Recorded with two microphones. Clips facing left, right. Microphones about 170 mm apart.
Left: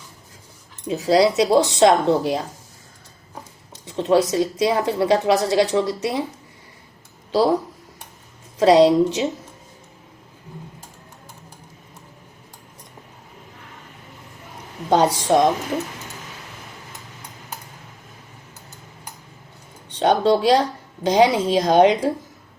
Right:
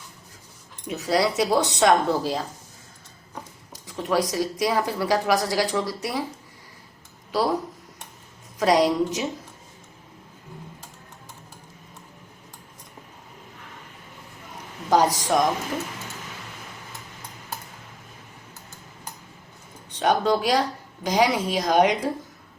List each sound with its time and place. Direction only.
0.9 s speech: 25° left (ahead or behind)
3.7 s speech: 25° left (ahead or behind)
8.5 s speech: 25° left (ahead or behind)
14.8 s speech: 25° left (ahead or behind)
20.0 s speech: 25° left (ahead or behind)